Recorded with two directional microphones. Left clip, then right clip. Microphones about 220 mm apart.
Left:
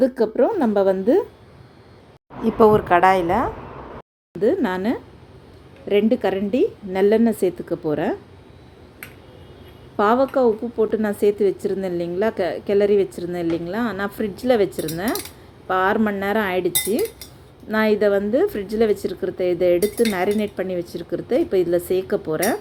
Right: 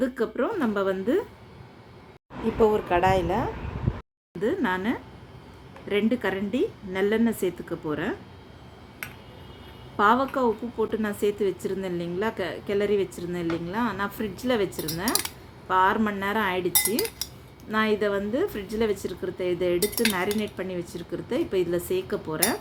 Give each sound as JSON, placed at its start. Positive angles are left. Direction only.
{"t": 0.0, "sound": "speech", "side_deg": 20}
{"t": 2.4, "sound": "a woman's voice", "side_deg": 25}
{"t": 10.0, "sound": "speech", "side_deg": 15}